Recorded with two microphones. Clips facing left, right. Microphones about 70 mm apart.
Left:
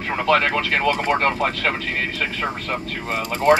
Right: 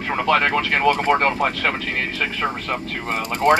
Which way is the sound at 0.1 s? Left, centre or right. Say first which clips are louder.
Even; right.